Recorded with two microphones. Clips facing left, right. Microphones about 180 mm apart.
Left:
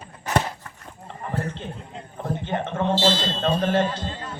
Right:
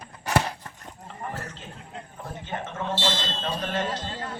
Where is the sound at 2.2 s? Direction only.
55° left (ahead or behind).